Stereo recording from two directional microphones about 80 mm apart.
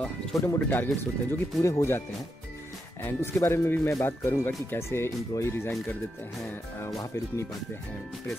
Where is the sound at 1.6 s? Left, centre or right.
Left.